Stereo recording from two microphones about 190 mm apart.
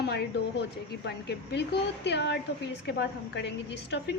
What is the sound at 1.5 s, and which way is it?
A woman's voice, 65° left (ahead or behind).